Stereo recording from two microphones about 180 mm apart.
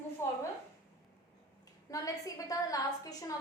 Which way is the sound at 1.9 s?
20° left (ahead or behind).